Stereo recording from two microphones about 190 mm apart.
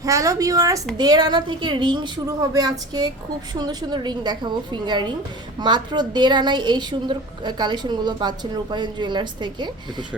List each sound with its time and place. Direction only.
0.0 s a woman's voice: 15° right (ahead or behind)